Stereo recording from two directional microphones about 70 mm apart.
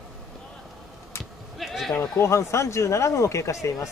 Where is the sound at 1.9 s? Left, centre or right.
Left.